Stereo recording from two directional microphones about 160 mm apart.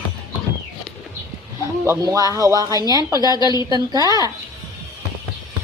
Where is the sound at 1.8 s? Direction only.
20° right (ahead or behind).